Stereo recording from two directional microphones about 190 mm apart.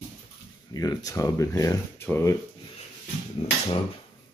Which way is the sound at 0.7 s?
20° left (ahead or behind).